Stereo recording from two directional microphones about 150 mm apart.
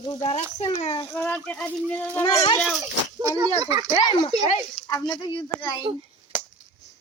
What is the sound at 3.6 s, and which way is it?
Speech, 25° right (ahead or behind).